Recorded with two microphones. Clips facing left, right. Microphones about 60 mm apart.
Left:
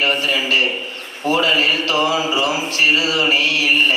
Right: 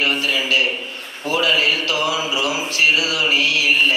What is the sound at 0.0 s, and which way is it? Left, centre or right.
Speech, left.